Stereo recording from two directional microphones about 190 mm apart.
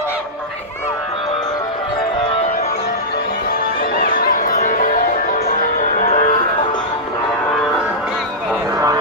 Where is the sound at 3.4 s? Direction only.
50° left (ahead or behind).